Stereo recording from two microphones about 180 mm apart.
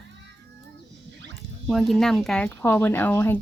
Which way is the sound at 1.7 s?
Centre (ahead or behind).